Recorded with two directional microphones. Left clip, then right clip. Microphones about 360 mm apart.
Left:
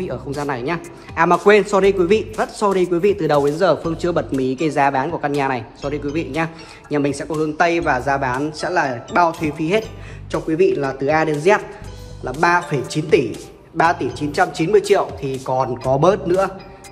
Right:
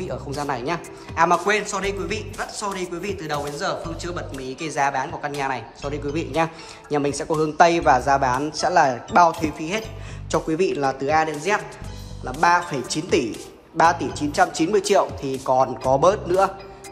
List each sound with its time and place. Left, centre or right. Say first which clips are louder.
0.0 s speech: left 3 dB; centre